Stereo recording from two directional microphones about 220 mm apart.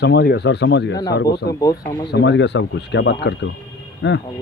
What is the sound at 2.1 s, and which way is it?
Speech, 55° left (ahead or behind).